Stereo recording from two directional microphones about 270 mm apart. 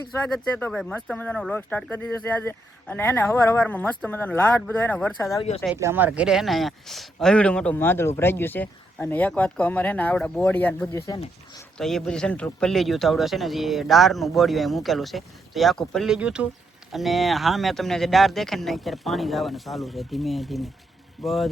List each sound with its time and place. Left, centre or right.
0.3 s speech: centre
5.6 s speech: centre